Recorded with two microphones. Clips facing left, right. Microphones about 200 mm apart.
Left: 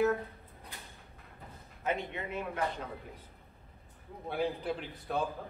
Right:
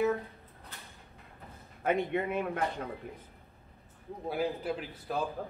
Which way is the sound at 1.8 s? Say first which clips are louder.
Right 6 dB; 55° right (ahead or behind).